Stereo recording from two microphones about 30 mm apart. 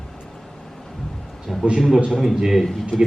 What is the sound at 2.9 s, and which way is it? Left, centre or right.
Speech, left.